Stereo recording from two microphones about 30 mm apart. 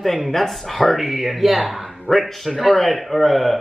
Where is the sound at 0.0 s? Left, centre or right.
Centre.